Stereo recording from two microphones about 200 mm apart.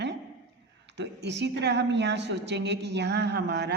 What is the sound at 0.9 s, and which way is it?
A woman's voice, 60° right (ahead or behind).